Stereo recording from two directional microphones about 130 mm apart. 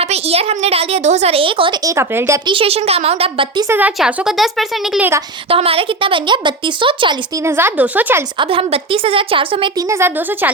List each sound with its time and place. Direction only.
0.0 s a woman's voice: 50° right (ahead or behind)
1.8 s a woman's voice: 20° right (ahead or behind)
2.5 s a woman's voice: 45° right (ahead or behind)
3.7 s speech: 15° right (ahead or behind)
4.9 s speech: 15° right (ahead or behind)
5.5 s speech: 45° right (ahead or behind)
7.4 s speech: 15° right (ahead or behind)
8.4 s a woman's voice: 45° right (ahead or behind)
9.7 s speech: 20° right (ahead or behind)